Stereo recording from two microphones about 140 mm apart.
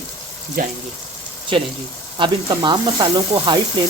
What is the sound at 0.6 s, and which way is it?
Speech, 90° right.